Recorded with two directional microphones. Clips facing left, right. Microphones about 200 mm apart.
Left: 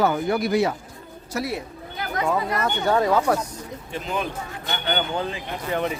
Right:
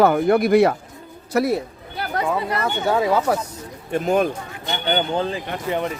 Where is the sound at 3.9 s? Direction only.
50° right (ahead or behind).